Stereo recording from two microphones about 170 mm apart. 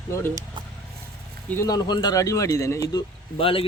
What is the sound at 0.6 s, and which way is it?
Vehicle, 25° right (ahead or behind).